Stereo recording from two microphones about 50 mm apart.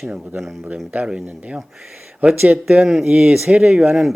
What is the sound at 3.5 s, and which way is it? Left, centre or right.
Speech, right.